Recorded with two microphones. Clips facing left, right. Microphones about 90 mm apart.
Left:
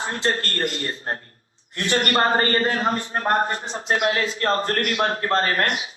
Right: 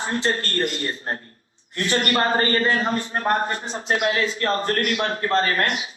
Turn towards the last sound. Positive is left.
turn(degrees=45)  # may be behind; listen again after turning